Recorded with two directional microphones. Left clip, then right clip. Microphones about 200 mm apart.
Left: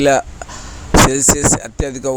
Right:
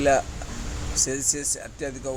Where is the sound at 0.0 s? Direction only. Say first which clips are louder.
Left 7 dB; 40° left (ahead or behind).